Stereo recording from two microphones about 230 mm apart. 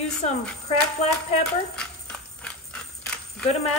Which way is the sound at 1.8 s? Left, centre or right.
Centre.